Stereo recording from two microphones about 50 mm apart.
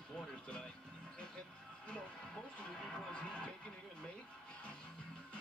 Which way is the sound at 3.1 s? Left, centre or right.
Left.